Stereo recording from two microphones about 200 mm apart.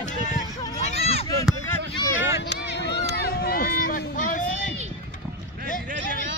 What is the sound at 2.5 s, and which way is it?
Run, 60° left (ahead or behind).